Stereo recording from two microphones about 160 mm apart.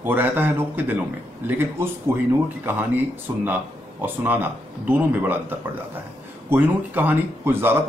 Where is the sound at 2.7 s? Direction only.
15° right (ahead or behind).